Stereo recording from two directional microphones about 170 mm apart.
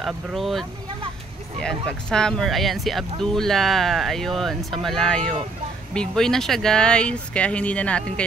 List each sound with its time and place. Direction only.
0.0 s speech: centre (ahead or behind)